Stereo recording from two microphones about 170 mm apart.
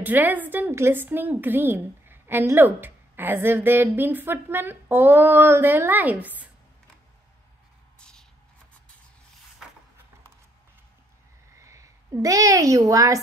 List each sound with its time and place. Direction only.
0.0 s a woman's voice: 10° right (ahead or behind)
8.0 s shuffle: 5° left (ahead or behind)
11.5 s a woman's voice: 15° right (ahead or behind)